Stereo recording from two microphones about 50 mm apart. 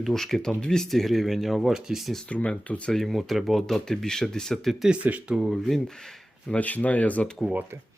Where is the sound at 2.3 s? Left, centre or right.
Left.